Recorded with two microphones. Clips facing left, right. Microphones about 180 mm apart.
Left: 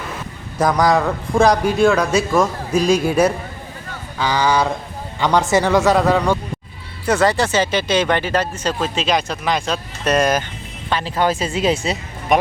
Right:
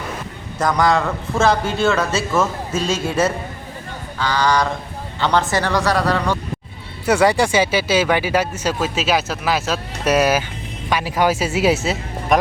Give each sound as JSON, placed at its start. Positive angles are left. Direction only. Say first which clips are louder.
{"t": 0.6, "sound": "speech", "louder": "left 2 dB", "side_deg": 0}
{"t": 1.0, "sound": "a man's voice", "louder": "left 4 dB", "side_deg": 15}
{"t": 1.5, "sound": "speech", "louder": "left 2 dB", "side_deg": 0}
{"t": 4.2, "sound": "a man's voice", "louder": "left 1 dB", "side_deg": 10}
{"t": 7.0, "sound": "speech", "louder": "right 1 dB", "side_deg": -10}